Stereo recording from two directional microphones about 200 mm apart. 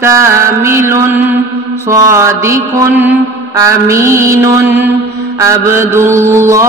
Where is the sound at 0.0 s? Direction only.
15° right (ahead or behind).